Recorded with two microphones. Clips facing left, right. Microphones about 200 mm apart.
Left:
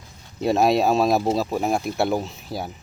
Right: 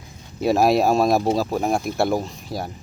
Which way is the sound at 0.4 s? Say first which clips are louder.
Right 1 dB; centre (ahead or behind).